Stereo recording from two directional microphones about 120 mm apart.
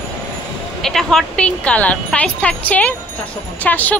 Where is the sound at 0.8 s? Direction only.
5° left (ahead or behind).